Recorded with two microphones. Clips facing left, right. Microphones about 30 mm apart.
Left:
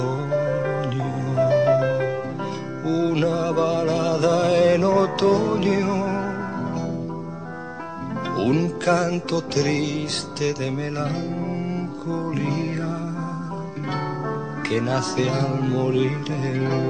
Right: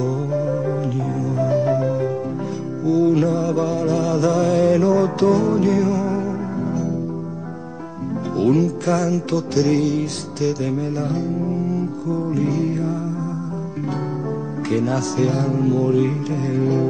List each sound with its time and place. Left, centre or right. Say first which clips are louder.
0.0 s music: right 1 dB; left
8.4 s music: right 4 dB; left
9.6 s music: right 6 dB; centre
10.6 s music: right 3 dB; left
14.7 s music: right 2 dB; left